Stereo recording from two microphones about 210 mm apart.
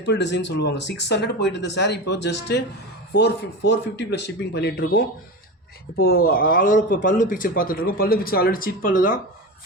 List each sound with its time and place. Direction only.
0.0 s speech: 55° left (ahead or behind)